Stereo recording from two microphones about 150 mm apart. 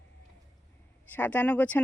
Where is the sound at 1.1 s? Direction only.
10° left (ahead or behind).